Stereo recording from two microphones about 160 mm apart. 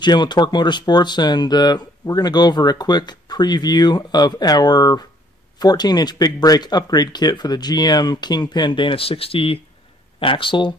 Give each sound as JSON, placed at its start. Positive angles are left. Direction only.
{"t": 0.0, "sound": "speech", "side_deg": 25}